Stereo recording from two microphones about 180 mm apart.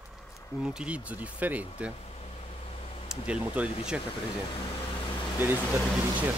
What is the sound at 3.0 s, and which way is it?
Speech, 5° right (ahead or behind).